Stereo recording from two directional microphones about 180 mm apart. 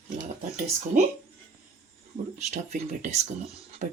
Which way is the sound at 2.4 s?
40° right (ahead or behind).